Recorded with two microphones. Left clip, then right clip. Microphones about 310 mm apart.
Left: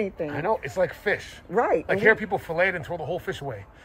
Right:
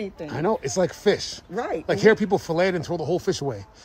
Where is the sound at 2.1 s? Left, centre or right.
Right.